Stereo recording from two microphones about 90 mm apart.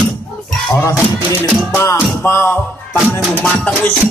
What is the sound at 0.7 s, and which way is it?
Music, 25° left (ahead or behind).